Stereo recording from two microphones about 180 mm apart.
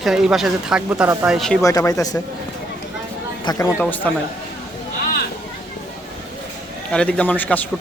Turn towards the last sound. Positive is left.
turn(degrees=10)  # may be behind; listen again after turning